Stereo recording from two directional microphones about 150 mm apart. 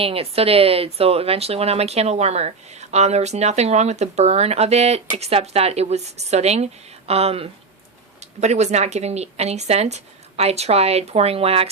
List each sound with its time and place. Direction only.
0.0 s speech: 40° right (ahead or behind)